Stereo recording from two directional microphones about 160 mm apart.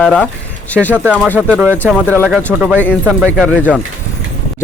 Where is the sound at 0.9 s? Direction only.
10° right (ahead or behind).